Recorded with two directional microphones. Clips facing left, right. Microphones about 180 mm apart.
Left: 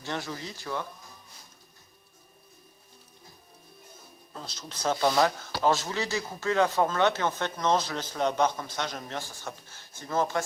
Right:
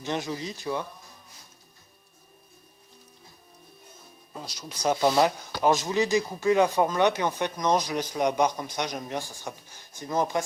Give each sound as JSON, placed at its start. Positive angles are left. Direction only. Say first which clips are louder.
{"t": 0.0, "sound": "speech", "louder": "right 4 dB", "side_deg": -20}
{"t": 4.4, "sound": "speech", "louder": "right 2 dB", "side_deg": -10}